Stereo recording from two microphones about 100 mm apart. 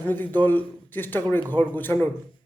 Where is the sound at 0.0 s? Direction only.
20° left (ahead or behind).